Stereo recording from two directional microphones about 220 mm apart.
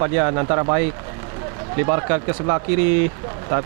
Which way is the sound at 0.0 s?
20° right (ahead or behind).